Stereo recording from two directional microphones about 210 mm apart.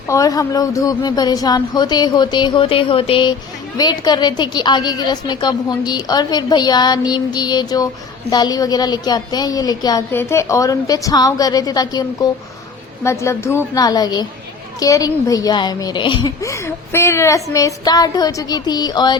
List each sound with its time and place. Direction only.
0.1 s a woman's voice: 15° left (ahead or behind)